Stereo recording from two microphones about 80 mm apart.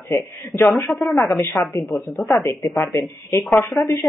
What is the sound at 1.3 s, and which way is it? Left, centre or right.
Speech, left.